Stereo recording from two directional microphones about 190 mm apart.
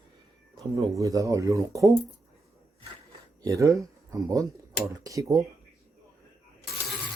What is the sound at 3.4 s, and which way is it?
Speech, 15° right (ahead or behind).